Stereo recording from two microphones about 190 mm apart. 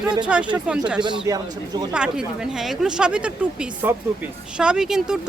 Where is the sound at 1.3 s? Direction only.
15° right (ahead or behind).